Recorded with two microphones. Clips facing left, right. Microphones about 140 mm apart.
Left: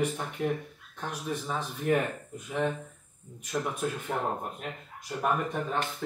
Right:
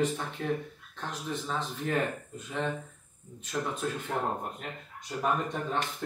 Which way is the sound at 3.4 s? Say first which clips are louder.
Left 1 dB; 10° left (ahead or behind).